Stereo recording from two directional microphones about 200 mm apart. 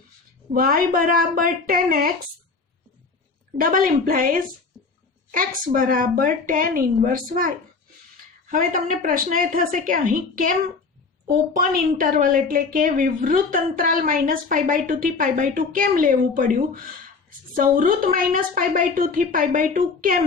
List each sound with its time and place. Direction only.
0.5 s a woman's voice: 45° right (ahead or behind)
3.6 s a woman's voice: 45° right (ahead or behind)